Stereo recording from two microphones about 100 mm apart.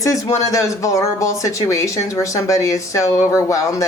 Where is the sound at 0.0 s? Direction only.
35° left (ahead or behind).